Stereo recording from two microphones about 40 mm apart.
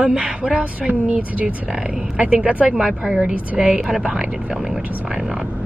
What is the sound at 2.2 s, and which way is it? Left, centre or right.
Speech, right.